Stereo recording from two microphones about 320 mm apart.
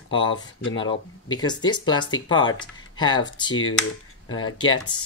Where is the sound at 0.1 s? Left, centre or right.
Centre.